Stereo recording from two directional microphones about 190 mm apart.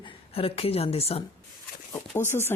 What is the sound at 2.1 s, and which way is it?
Speech, 15° left (ahead or behind).